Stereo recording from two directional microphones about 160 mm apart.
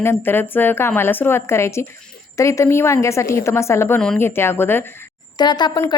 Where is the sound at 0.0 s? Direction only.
15° left (ahead or behind).